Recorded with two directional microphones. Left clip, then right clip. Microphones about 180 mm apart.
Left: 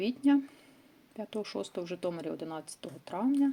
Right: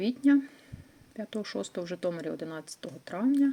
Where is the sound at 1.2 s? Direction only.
20° right (ahead or behind).